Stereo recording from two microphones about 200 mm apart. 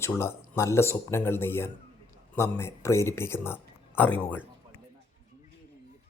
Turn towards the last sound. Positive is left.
turn(degrees=10)  # may be behind; listen again after turning